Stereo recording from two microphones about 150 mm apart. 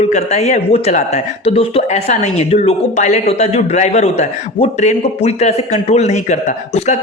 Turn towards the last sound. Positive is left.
turn(degrees=50)  # may be behind; listen again after turning